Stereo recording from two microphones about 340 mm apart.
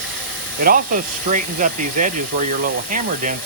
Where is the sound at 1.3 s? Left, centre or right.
Right.